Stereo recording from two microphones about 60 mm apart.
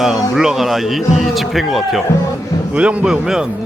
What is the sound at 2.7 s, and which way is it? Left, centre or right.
Speech, right.